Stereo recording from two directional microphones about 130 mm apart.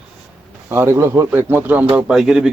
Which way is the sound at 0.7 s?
20° right (ahead or behind).